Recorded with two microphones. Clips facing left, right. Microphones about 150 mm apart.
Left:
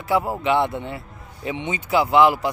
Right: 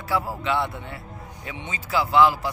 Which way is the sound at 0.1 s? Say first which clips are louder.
Left 5 dB; 20° left (ahead or behind).